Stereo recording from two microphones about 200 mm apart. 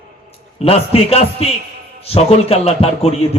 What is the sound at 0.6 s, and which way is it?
A man's voice, 30° left (ahead or behind).